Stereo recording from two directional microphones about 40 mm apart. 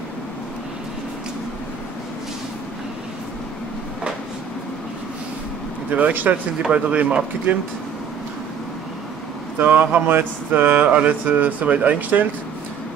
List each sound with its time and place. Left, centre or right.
5.9 s speech: right
7.5 s speech: right
9.6 s speech: right